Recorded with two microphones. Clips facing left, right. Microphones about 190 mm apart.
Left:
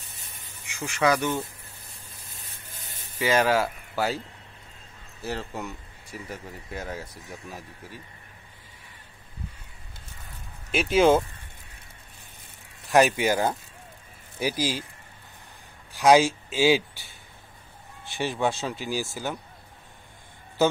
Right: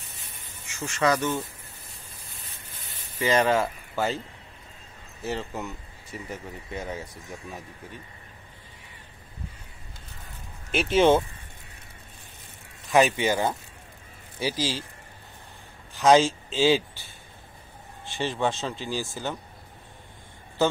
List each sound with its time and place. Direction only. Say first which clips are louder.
0.7 s speech: left 1 dB; 10° left (ahead or behind)
3.2 s speech: even; 5° left (ahead or behind)
5.2 s speech: right 1 dB; centre (ahead or behind)
10.7 s speech: even; 5° left (ahead or behind)
13.0 s speech: left 1 dB; 10° left (ahead or behind)
16.0 s a man's voice: even; 10° left (ahead or behind)
18.1 s speech: even; 10° left (ahead or behind)